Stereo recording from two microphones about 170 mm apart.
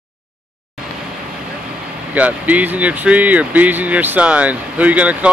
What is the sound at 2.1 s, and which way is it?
Speech, 10° right (ahead or behind).